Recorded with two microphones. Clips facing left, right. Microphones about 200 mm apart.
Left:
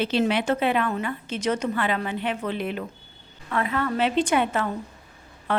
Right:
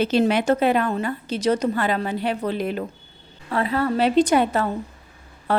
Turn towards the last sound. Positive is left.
turn(degrees=-35)  # may be behind; listen again after turning